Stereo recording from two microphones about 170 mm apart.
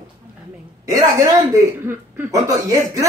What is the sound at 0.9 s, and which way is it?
Speech, 20° right (ahead or behind).